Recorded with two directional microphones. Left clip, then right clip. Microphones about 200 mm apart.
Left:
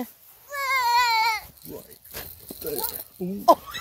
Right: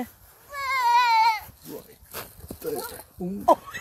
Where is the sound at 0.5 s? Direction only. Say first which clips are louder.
Even; 65° left (ahead or behind).